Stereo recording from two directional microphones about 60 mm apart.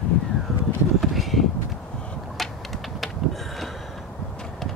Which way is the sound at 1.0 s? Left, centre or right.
Centre.